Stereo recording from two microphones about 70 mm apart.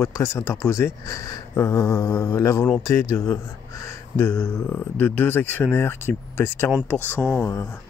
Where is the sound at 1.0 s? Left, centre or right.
Left.